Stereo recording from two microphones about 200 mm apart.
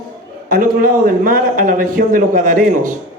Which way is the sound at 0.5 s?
45° right (ahead or behind).